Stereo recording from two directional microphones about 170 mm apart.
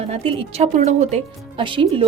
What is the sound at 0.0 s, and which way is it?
Speech, 35° right (ahead or behind).